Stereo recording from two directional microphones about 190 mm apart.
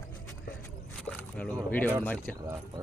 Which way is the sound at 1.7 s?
10° left (ahead or behind).